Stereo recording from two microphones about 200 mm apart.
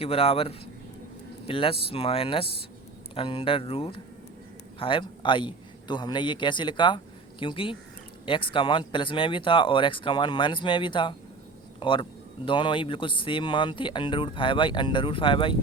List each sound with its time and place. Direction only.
0.0 s a man's voice: 30° left (ahead or behind)